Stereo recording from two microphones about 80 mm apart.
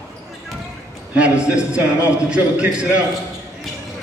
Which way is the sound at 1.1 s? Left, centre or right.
Centre.